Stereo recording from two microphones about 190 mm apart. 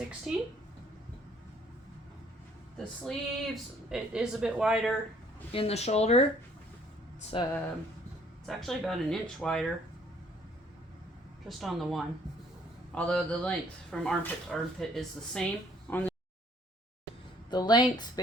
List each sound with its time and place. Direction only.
0.3 s speech: centre (ahead or behind)
2.7 s speech: centre (ahead or behind)
5.5 s speech: 30° left (ahead or behind)
7.3 s speech: 25° left (ahead or behind)
8.4 s speech: centre (ahead or behind)
11.4 s speech: centre (ahead or behind)
17.5 s speech: 20° left (ahead or behind)